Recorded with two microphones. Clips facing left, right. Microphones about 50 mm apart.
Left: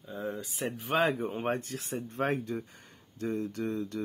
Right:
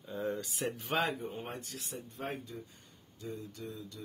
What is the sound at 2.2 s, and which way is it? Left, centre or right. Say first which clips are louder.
Speech: left 10 dB; left.